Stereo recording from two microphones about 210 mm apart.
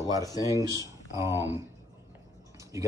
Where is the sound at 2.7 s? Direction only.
15° right (ahead or behind).